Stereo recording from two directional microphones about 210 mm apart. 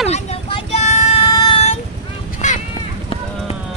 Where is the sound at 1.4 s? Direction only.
25° left (ahead or behind).